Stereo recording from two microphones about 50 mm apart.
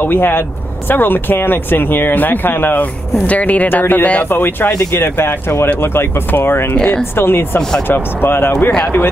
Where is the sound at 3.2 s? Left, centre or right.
Left.